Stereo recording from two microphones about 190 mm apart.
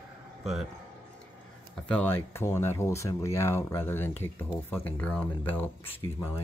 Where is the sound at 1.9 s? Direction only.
10° left (ahead or behind).